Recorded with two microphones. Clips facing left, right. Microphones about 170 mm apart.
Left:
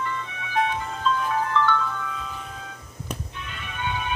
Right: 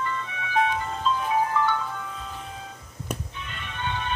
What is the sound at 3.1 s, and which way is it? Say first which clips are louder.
Music: right 1 dB; centre (ahead or behind).